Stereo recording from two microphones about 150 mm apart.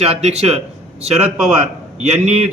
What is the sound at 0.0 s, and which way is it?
Speech, 45° right (ahead or behind).